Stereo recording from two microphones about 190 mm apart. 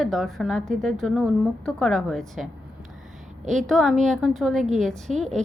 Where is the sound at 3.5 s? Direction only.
Centre (ahead or behind).